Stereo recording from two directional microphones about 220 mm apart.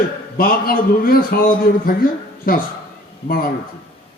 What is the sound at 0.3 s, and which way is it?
A man's voice, 40° left (ahead or behind).